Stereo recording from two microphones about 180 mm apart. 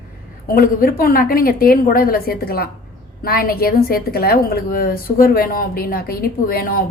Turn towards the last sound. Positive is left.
turn(degrees=55)  # may be behind; listen again after turning